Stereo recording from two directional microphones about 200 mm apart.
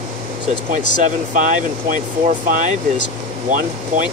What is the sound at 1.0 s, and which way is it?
Speech, 40° right (ahead or behind).